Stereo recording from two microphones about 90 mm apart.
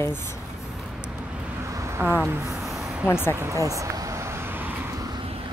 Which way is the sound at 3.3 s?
35° right (ahead or behind).